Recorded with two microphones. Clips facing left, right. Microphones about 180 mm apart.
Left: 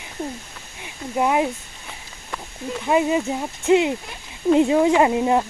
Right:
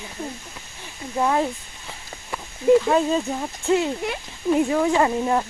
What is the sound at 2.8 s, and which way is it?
Speech, 15° left (ahead or behind).